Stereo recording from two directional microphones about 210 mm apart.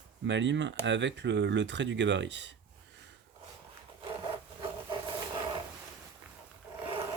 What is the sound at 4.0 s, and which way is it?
Wood, 25° right (ahead or behind).